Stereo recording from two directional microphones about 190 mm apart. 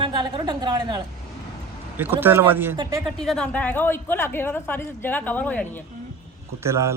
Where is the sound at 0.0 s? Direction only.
25° right (ahead or behind).